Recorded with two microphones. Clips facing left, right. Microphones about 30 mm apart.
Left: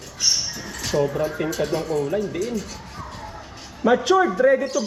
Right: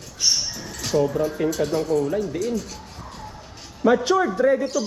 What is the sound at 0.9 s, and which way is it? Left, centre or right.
Speech, left.